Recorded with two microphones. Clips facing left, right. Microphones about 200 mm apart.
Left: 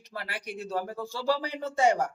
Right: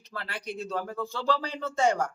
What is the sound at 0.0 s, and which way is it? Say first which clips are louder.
A man's voice: even; 15° left (ahead or behind).